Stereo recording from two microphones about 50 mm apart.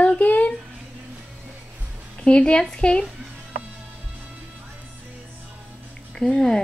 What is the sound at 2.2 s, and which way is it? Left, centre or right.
Speech, left.